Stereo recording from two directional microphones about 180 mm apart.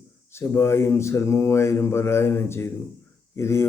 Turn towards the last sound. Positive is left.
turn(degrees=15)  # may be behind; listen again after turning